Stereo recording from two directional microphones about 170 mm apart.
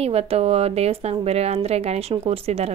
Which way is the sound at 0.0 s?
35° right (ahead or behind).